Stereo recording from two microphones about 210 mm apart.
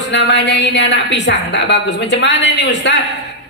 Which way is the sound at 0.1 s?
55° left (ahead or behind).